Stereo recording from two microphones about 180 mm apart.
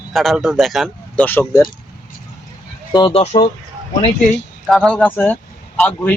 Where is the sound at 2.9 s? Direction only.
30° left (ahead or behind).